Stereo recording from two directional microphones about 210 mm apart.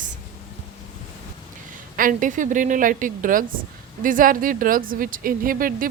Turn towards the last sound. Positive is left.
turn(degrees=-45)  # may be behind; listen again after turning